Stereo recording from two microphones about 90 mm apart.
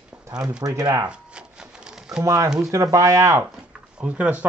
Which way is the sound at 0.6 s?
35° right (ahead or behind).